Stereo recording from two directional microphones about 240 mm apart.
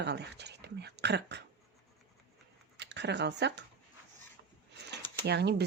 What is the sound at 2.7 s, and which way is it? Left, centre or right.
Speech, right.